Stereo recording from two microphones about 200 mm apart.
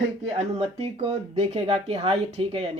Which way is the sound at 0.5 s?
30° right (ahead or behind).